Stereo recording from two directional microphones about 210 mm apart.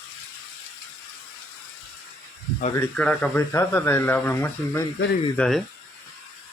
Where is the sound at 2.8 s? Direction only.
5° left (ahead or behind).